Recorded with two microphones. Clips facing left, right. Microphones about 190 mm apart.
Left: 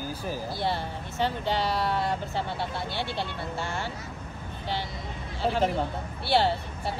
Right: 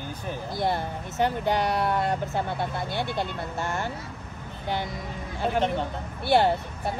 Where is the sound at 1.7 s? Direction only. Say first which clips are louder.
Right 2 dB; 55° right (ahead or behind).